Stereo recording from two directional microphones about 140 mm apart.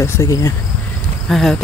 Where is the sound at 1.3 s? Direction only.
Centre (ahead or behind).